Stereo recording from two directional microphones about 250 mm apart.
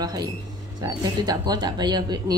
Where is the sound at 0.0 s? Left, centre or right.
Centre.